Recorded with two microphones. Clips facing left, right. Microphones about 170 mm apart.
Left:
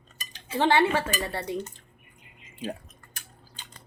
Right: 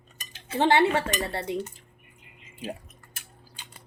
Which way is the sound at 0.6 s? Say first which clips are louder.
Right 1 dB; 25° right (ahead or behind).